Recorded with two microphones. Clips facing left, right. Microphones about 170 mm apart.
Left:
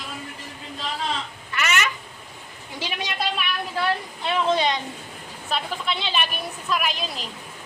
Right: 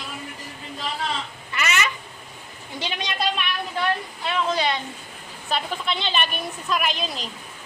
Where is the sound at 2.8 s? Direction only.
5° left (ahead or behind).